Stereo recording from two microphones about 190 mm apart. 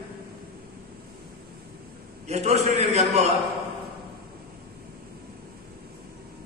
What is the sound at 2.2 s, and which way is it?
A man's voice, 35° right (ahead or behind).